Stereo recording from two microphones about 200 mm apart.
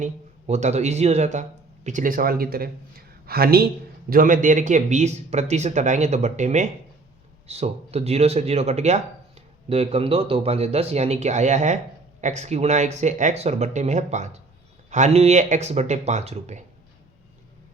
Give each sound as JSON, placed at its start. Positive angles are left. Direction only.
{"t": 0.0, "sound": "speech", "side_deg": -35}